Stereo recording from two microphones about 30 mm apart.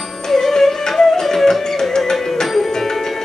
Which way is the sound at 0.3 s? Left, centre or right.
Centre.